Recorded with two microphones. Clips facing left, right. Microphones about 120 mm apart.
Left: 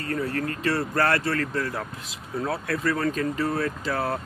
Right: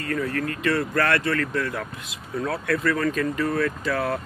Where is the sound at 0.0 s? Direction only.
30° left (ahead or behind).